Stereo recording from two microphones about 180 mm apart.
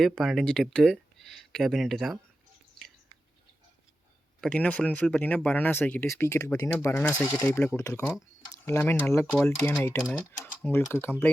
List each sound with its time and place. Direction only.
0.0 s speech: centre (ahead or behind)
4.4 s speech: 5° left (ahead or behind)